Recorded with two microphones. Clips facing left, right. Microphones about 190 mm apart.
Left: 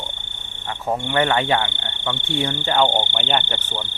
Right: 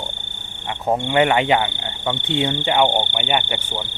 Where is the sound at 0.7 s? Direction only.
20° right (ahead or behind).